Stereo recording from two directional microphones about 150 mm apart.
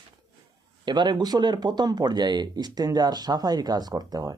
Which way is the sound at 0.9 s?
30° right (ahead or behind).